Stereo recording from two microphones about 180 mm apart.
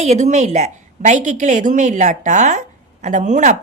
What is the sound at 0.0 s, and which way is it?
A woman's voice, 40° right (ahead or behind).